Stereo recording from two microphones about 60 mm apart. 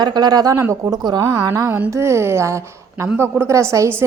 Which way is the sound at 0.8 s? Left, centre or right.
Right.